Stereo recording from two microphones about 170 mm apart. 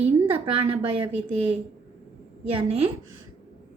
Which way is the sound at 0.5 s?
35° right (ahead or behind).